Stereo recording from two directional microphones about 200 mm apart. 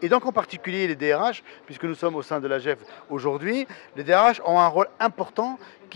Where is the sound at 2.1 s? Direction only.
25° left (ahead or behind).